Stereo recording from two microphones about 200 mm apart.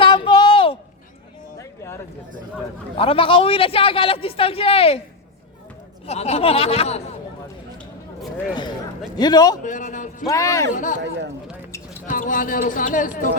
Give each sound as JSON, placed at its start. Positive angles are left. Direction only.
{"t": 0.0, "sound": "a sound", "side_deg": 25}
{"t": 1.5, "sound": "a sound", "side_deg": 15}
{"t": 3.0, "sound": "a man's voice", "side_deg": 25}
{"t": 6.1, "sound": "speech", "side_deg": 30}
{"t": 9.1, "sound": "a man's voice", "side_deg": 20}
{"t": 9.6, "sound": "speech", "side_deg": 40}
{"t": 10.2, "sound": "speech", "side_deg": 15}
{"t": 10.8, "sound": "speech", "side_deg": 40}
{"t": 12.0, "sound": "speech", "side_deg": 40}